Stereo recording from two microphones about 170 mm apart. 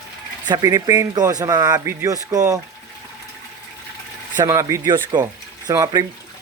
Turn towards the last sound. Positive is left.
turn(degrees=-20)  # may be behind; listen again after turning